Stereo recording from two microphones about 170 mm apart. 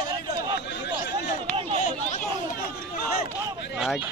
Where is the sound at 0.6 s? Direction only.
85° left.